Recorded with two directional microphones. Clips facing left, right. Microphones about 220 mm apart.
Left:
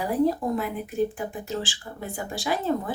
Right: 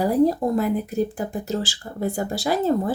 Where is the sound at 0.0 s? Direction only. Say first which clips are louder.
Right 5 dB; 40° right (ahead or behind).